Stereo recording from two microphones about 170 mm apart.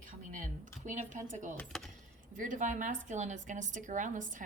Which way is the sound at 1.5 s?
5° left (ahead or behind).